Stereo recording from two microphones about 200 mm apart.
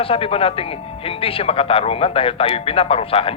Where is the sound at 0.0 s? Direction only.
30° left (ahead or behind).